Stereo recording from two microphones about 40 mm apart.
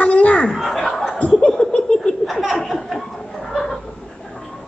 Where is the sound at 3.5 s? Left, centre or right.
Centre.